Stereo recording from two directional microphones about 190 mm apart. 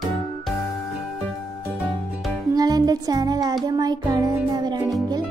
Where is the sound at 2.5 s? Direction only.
20° right (ahead or behind).